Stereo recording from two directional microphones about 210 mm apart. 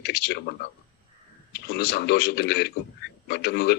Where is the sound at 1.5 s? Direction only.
50° left (ahead or behind).